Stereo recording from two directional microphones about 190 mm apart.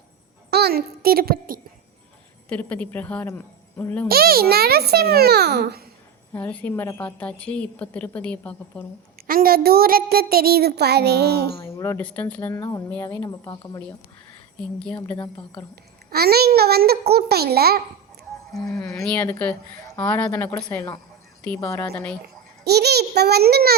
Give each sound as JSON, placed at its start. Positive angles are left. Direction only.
{"t": 0.5, "sound": "a child's voice", "side_deg": -55}
{"t": 2.5, "sound": "a woman's voice", "side_deg": 5}
{"t": 4.1, "sound": "a child's voice", "side_deg": -55}
{"t": 6.3, "sound": "a woman's voice", "side_deg": 10}
{"t": 9.2, "sound": "a woman's voice", "side_deg": -50}
{"t": 11.6, "sound": "a woman's voice", "side_deg": 15}
{"t": 13.2, "sound": "a woman's voice", "side_deg": 25}
{"t": 14.6, "sound": "a woman's voice", "side_deg": 5}
{"t": 15.7, "sound": "a child's voice", "side_deg": -55}
{"t": 18.5, "sound": "a woman's voice", "side_deg": 0}
{"t": 20.6, "sound": "a woman's voice", "side_deg": 20}
{"t": 22.6, "sound": "a child's voice", "side_deg": -60}